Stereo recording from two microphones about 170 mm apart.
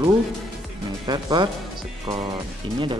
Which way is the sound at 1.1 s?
25° right (ahead or behind).